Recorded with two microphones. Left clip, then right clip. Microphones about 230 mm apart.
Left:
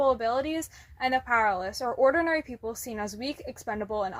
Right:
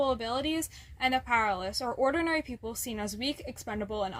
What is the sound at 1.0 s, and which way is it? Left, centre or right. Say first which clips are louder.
Speech: left 2 dB; right.